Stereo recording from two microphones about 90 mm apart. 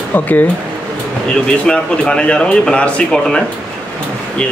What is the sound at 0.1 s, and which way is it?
Speech, 20° left (ahead or behind).